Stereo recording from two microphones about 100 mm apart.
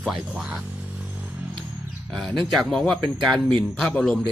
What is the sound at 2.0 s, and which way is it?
Speech, 5° left (ahead or behind).